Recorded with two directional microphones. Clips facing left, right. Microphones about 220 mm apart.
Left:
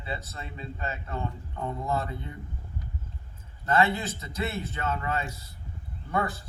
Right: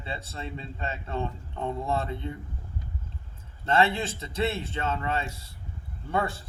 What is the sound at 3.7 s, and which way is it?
A man's voice, 30° right (ahead or behind).